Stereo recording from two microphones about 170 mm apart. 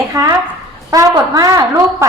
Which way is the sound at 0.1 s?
20° right (ahead or behind).